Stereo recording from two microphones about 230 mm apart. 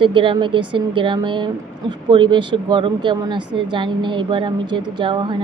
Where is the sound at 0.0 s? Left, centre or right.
Right.